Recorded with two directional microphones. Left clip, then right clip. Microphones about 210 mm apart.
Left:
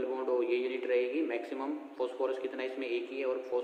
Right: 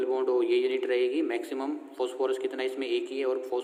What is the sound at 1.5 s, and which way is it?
Speech, 80° right.